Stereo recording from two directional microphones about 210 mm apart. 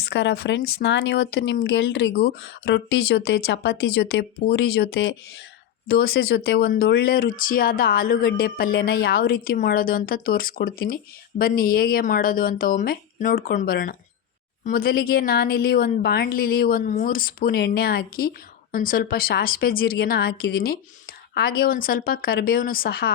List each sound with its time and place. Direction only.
0.0 s speech: 55° left (ahead or behind)